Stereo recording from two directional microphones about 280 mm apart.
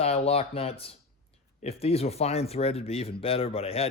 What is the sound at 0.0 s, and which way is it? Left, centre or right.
Speech, left.